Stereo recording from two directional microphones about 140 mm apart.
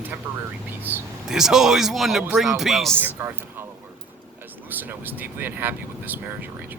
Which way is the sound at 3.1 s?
15° right (ahead or behind).